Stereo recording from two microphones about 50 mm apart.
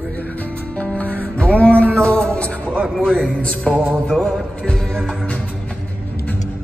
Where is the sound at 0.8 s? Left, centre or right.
Left.